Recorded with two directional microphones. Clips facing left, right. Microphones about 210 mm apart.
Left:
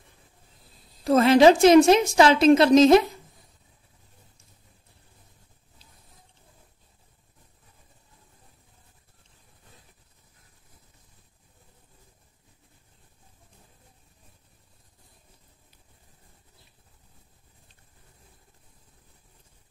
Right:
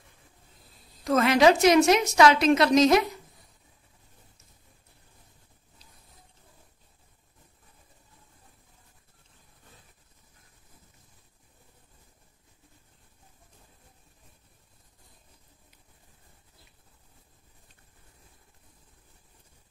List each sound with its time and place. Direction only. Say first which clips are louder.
1.0 s a woman's voice: left 4 dB; 30° left (ahead or behind)